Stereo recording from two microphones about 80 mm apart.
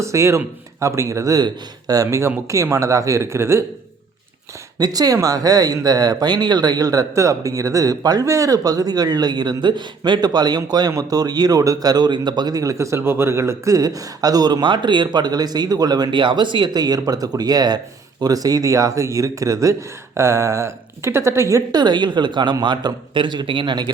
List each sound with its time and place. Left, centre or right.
0.0 s speech: right
4.8 s a man's voice: right
16.7 s speech: right
21.7 s a man's voice: right